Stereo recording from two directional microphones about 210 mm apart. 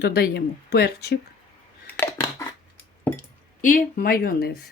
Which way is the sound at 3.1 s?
40° left (ahead or behind).